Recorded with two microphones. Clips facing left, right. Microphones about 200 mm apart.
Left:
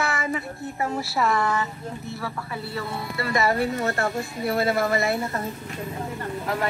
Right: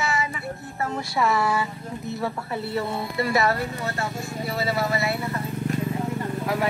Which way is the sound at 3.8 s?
55° left (ahead or behind).